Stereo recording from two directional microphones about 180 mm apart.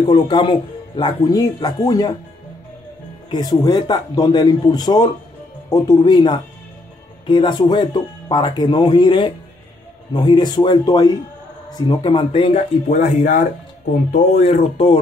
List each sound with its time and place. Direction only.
0.0 s speech: 25° left (ahead or behind)
3.3 s speech: 20° left (ahead or behind)